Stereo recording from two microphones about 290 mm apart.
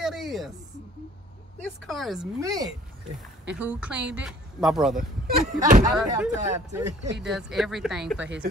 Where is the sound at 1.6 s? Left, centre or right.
Centre.